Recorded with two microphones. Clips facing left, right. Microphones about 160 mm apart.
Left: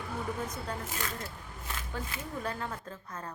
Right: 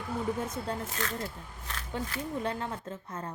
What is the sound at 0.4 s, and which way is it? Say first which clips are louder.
Speech: right 3 dB; 25° right (ahead or behind).